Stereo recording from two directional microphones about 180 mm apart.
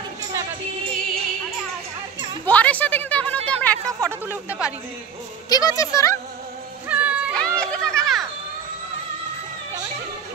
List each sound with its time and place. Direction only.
2.4 s a sound: 10° left (ahead or behind)
4.0 s speech: 10° right (ahead or behind)
5.5 s speech: 20° left (ahead or behind)
6.9 s music: 5° right (ahead or behind)
7.3 s children playing: 5° left (ahead or behind)